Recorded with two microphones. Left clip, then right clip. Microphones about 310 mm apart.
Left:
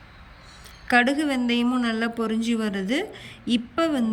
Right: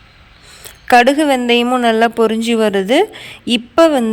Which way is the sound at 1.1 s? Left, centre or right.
Centre.